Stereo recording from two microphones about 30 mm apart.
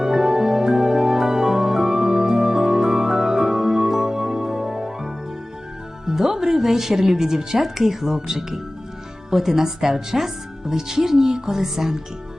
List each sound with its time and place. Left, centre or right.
0.0 s music: centre
6.1 s a woman's voice: centre